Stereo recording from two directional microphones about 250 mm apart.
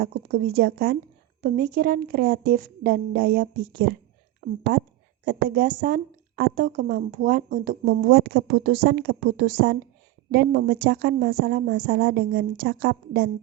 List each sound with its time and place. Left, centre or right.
0.0 s a woman's voice: right